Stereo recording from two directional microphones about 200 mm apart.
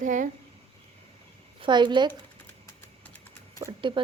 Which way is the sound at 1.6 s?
25° right (ahead or behind).